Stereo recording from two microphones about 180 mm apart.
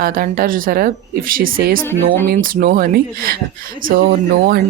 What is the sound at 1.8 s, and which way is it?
Speech, 10° left (ahead or behind).